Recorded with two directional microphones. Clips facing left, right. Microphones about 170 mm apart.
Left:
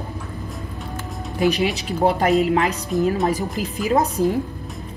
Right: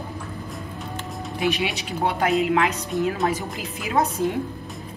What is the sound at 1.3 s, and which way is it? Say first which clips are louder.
A woman's voice: left 5 dB; 40° left (ahead or behind).